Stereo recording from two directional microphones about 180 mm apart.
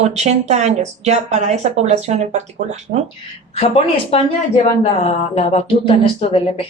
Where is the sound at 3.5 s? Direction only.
30° left (ahead or behind).